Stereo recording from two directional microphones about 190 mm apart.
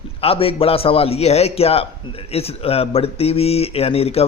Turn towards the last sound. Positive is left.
turn(degrees=30)  # may be behind; listen again after turning